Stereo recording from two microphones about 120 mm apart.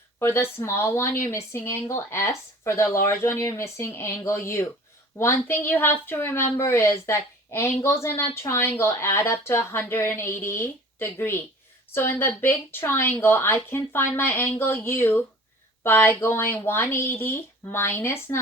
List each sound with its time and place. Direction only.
0.2 s a woman's voice: 20° left (ahead or behind)